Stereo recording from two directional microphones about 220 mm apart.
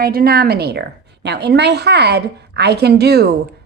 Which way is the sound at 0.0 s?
40° right (ahead or behind).